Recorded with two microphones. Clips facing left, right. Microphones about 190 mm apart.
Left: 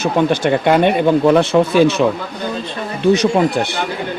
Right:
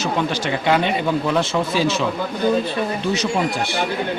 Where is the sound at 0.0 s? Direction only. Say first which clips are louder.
Left 7 dB; 55° left (ahead or behind).